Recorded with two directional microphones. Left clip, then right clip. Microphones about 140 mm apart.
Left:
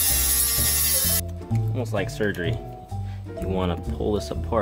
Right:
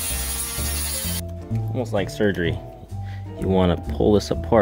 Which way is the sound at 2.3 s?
45° right (ahead or behind).